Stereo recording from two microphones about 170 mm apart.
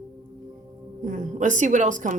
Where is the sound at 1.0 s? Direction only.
50° right (ahead or behind).